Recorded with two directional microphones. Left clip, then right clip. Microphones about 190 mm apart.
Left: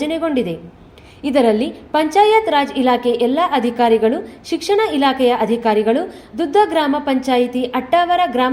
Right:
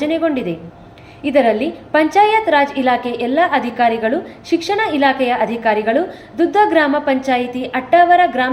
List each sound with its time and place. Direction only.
0.0 s a woman's voice: 35° left (ahead or behind)